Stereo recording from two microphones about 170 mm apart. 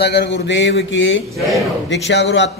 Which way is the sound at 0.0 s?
75° left (ahead or behind).